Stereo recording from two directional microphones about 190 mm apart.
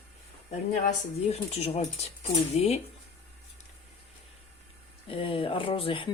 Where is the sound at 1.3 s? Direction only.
35° left (ahead or behind).